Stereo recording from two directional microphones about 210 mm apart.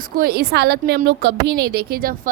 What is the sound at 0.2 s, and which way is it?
A woman's voice, 50° right (ahead or behind).